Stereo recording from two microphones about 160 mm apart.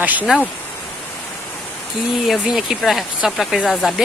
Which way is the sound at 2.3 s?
Centre (ahead or behind).